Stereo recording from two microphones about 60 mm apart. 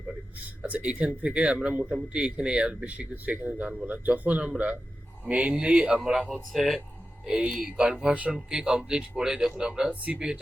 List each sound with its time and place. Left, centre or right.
0.7 s speech: right
6.0 s a man's voice: centre; by 10.2 s right
10.2 s a man's voice: centre